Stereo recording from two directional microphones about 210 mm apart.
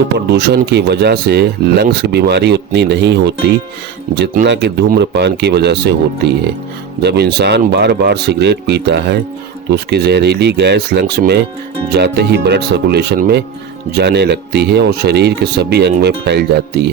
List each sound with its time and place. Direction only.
0.3 s speech: 50° right (ahead or behind)